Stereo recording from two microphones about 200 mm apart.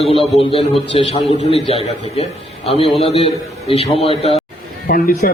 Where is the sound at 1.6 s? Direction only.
30° left (ahead or behind).